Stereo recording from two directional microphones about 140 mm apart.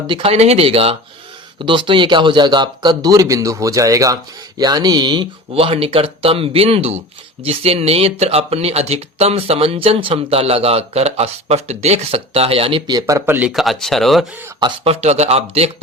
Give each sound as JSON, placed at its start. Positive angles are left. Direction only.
{"t": 0.1, "sound": "a man's voice", "side_deg": -45}
{"t": 12.9, "sound": "speech", "side_deg": -25}
{"t": 13.5, "sound": "speech", "side_deg": 0}
{"t": 14.8, "sound": "speech", "side_deg": -50}